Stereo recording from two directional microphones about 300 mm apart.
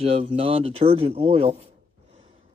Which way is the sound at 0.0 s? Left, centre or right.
Centre.